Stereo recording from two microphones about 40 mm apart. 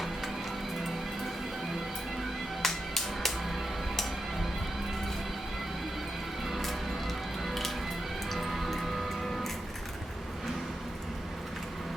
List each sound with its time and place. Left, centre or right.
2.6 s music: centre
6.5 s music: centre